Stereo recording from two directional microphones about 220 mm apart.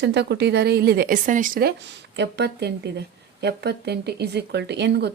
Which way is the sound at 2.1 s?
50° right (ahead or behind).